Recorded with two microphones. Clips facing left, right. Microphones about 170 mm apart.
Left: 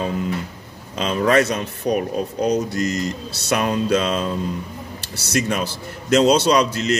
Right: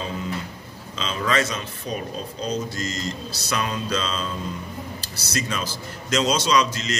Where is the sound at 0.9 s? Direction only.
55° left (ahead or behind).